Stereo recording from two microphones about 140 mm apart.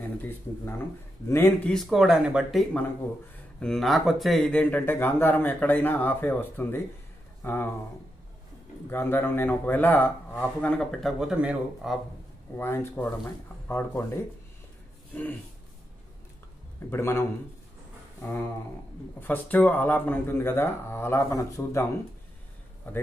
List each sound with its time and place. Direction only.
0.0 s speech: 15° left (ahead or behind)
4.5 s a man's voice: 10° left (ahead or behind)
8.8 s a man's voice: 15° left (ahead or behind); by 12.0 s 5° right (ahead or behind)
12.5 s a man's voice: 15° left (ahead or behind)
16.9 s a man's voice: 15° left (ahead or behind)
18.2 s a sound: 20° left (ahead or behind)
19.1 s a man's voice: 10° left (ahead or behind)